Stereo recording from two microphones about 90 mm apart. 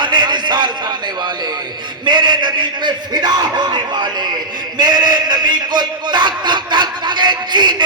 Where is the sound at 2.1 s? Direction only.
55° right (ahead or behind).